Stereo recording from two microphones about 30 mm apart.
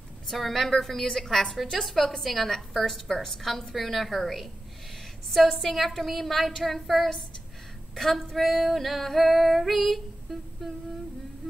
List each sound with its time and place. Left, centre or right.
0.3 s a woman's voice: centre
1.0 s a woman's voice: centre
5.6 s a woman's voice: centre